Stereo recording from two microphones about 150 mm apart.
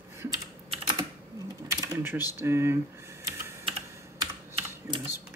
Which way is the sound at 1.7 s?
15° right (ahead or behind).